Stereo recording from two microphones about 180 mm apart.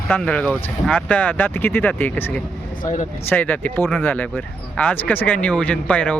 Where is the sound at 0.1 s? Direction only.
5° left (ahead or behind).